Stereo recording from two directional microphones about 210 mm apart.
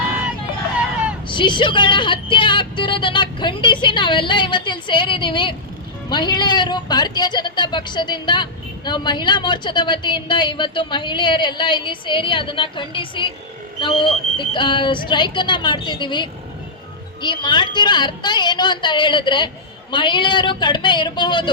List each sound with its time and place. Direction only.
1.3 s a woman's voice: 20° left (ahead or behind)